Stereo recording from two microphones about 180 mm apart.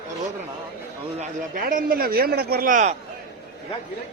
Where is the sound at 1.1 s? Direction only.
50° right (ahead or behind).